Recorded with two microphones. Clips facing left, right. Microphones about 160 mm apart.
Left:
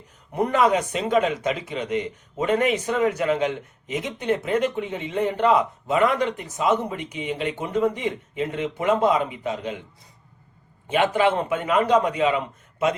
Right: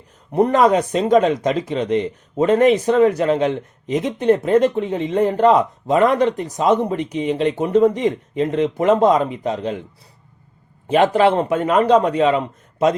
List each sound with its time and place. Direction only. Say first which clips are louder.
0.3 s a man's voice: right 6 dB; 35° right (ahead or behind)
10.8 s a man's voice: right 6 dB; 35° right (ahead or behind)